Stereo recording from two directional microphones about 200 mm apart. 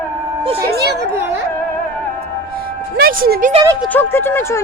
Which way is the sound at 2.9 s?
50° right (ahead or behind).